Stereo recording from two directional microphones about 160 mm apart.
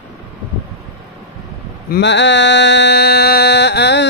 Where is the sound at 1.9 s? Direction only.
90° left.